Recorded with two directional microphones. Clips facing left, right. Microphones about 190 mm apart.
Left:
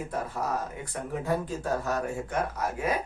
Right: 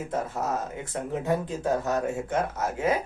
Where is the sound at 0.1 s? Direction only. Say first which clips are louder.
Right 3 dB; 25° right (ahead or behind).